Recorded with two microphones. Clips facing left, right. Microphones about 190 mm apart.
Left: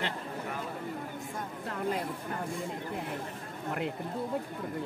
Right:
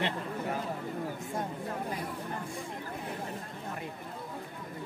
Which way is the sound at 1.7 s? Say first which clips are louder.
Left 3 dB; 85° left.